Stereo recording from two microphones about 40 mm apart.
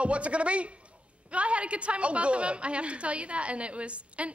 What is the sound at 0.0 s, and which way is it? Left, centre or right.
A woman's voice, right.